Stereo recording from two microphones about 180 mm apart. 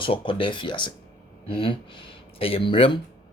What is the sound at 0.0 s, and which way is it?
Speech, 30° left (ahead or behind).